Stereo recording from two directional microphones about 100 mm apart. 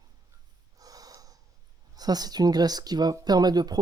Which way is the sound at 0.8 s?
40° right (ahead or behind).